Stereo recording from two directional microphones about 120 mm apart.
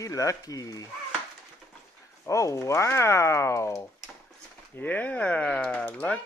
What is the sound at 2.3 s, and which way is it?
Speech, 25° left (ahead or behind).